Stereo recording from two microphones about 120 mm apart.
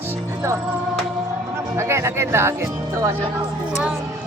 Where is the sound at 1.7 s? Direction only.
25° right (ahead or behind).